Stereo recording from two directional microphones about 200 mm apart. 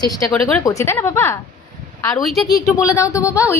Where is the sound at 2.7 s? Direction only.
15° left (ahead or behind).